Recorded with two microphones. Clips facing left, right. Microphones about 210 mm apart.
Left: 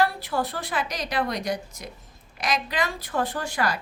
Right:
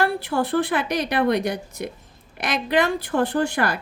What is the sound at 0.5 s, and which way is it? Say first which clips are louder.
Speech: right 9 dB; 60° right (ahead or behind).